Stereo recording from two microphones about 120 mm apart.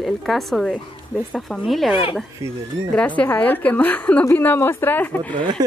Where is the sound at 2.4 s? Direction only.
25° right (ahead or behind).